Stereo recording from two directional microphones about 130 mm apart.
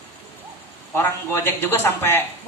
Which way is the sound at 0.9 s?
20° left (ahead or behind).